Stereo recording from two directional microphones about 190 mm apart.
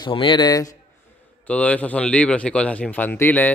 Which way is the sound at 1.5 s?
5° left (ahead or behind).